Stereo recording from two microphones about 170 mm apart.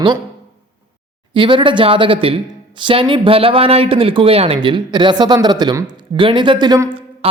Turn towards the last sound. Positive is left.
turn(degrees=-30)  # may be behind; listen again after turning